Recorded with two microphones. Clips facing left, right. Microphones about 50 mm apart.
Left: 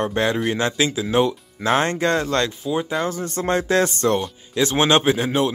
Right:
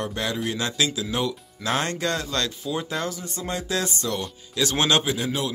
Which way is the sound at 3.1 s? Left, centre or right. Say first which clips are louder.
Left 9 dB; left.